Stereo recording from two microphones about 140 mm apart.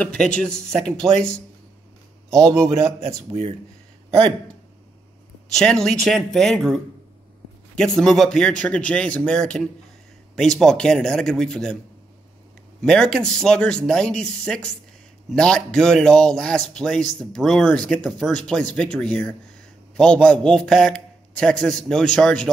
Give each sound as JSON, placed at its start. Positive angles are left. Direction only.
{"t": 0.0, "sound": "speech", "side_deg": 10}
{"t": 2.3, "sound": "a man's voice", "side_deg": -25}
{"t": 5.5, "sound": "speech", "side_deg": 5}
{"t": 12.8, "sound": "speech", "side_deg": 5}